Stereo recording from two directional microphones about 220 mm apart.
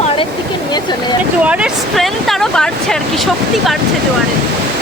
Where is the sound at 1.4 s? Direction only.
5° right (ahead or behind).